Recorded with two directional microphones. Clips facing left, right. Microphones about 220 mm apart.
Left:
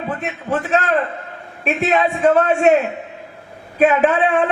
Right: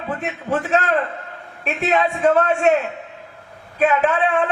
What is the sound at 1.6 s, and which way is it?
A man's voice, 5° left (ahead or behind).